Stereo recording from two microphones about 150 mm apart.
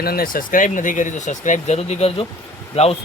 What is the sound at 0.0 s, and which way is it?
Speech, 85° left.